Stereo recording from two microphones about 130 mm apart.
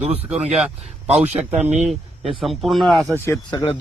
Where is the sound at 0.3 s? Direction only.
10° right (ahead or behind).